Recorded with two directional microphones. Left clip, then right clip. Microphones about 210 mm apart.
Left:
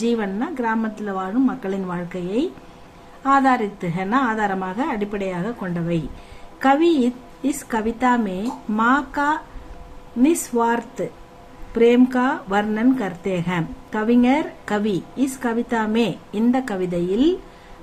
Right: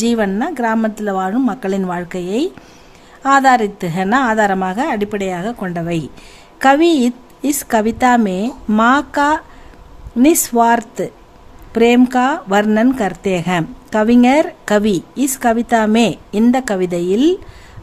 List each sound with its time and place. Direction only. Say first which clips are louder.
0.0 s speech: right 6 dB; 45° right (ahead or behind)